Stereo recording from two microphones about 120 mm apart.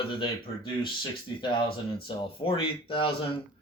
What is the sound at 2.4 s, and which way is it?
Speech, 50° left (ahead or behind).